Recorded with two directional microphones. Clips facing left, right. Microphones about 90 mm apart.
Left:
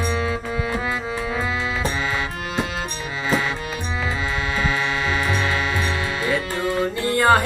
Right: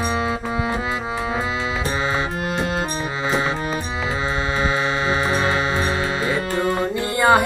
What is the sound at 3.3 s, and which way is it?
Music, 30° right (ahead or behind).